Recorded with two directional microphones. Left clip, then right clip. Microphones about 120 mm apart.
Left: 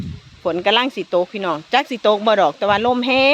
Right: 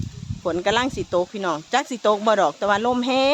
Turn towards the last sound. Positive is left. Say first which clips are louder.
# left 5 dB
turn(degrees=10)  # may be behind; listen again after turning